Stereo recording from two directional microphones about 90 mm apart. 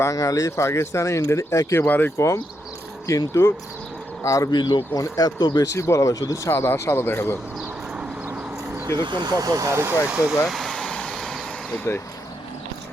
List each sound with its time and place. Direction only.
0.0 s speech: 40° left (ahead or behind)
1.9 s speech: 20° left (ahead or behind)
2.1 s speech: 30° left (ahead or behind)
4.5 s speech: 50° left (ahead or behind)
5.7 s speech: 35° left (ahead or behind)
6.5 s speech: 30° left (ahead or behind)
7.6 s a sound: 10° right (ahead or behind)
8.3 s a sound: 25° right (ahead or behind)
9.0 s speech: 55° right (ahead or behind); by 10.0 s 30° right (ahead or behind)
10.4 s vehicle: centre (ahead or behind)